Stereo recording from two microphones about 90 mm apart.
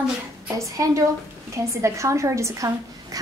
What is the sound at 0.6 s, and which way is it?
A woman's voice, 35° right (ahead or behind).